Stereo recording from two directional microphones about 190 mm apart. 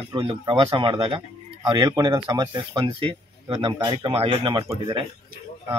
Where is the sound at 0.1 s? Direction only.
25° right (ahead or behind).